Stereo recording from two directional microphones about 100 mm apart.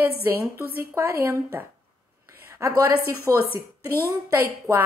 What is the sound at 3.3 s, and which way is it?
Speech, 30° right (ahead or behind).